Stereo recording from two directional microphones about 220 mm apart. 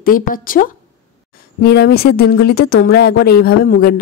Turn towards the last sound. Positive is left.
turn(degrees=45)  # may be behind; listen again after turning